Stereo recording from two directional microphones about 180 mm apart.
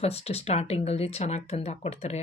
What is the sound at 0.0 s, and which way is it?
Speech, 35° left (ahead or behind).